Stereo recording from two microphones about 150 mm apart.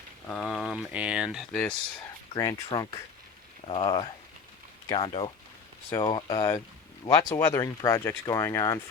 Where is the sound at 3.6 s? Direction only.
40° left (ahead or behind).